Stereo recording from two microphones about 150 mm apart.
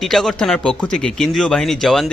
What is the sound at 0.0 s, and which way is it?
Speech, centre (ahead or behind).